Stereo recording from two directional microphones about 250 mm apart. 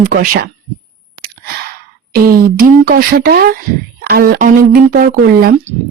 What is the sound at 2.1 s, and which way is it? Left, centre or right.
Speech, right.